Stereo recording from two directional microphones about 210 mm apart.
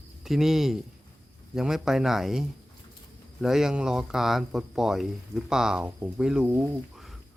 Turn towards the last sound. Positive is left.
turn(degrees=0)  # may be behind; listen again after turning